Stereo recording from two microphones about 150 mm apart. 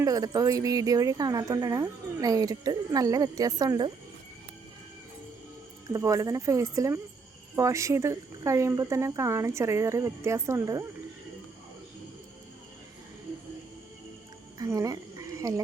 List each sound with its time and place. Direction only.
0.0 s speech: 25° right (ahead or behind)
5.9 s speech: 25° right (ahead or behind)
14.6 s a sound: 20° right (ahead or behind)